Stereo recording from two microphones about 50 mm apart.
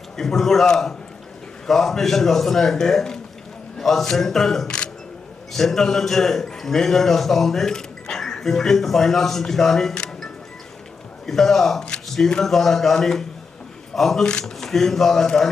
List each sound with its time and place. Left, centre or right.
0.2 s a man's voice: centre
11.3 s a man's voice: centre
12.0 s a sound: centre
12.4 s a man's voice: centre